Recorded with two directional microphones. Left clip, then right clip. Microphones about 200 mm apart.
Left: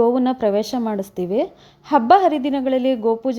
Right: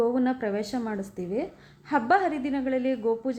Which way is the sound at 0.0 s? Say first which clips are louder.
Left 9 dB; 35° left (ahead or behind).